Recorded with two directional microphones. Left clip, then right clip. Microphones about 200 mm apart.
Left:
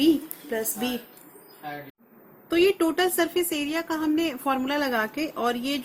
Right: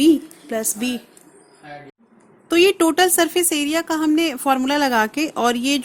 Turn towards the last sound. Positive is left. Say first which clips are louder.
# right 7 dB
turn(degrees=-55)  # may be behind; listen again after turning